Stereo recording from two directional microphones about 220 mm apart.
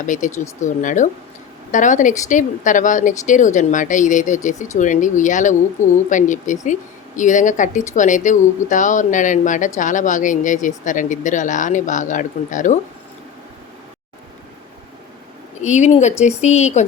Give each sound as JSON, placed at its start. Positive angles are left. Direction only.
{"t": 0.0, "sound": "speech", "side_deg": 35}
{"t": 15.6, "sound": "speech", "side_deg": 30}